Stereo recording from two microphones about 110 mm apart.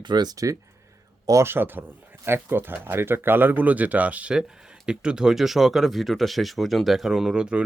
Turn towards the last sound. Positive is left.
turn(degrees=-10)  # may be behind; listen again after turning